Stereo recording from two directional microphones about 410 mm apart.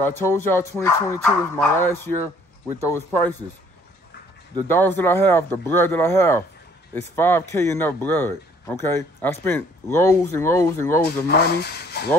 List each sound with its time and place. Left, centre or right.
0.0 s speech: centre
4.6 s speech: centre
11.2 s speech: left